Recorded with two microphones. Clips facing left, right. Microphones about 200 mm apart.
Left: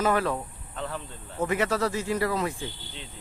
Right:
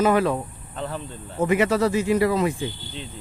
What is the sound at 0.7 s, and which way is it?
Speech, 30° right (ahead or behind).